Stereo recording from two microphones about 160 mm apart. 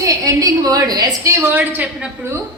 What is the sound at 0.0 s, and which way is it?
A woman's voice, 20° right (ahead or behind).